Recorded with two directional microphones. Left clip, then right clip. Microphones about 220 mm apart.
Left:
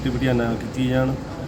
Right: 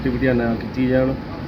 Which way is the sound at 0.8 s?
15° left (ahead or behind).